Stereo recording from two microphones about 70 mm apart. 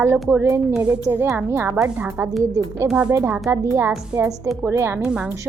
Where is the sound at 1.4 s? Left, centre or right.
Right.